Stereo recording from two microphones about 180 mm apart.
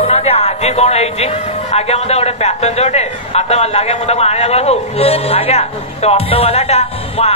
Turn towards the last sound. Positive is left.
turn(degrees=35)  # may be behind; listen again after turning